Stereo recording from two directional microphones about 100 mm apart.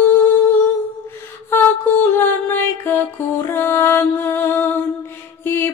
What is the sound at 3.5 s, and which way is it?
Music, 25° left (ahead or behind).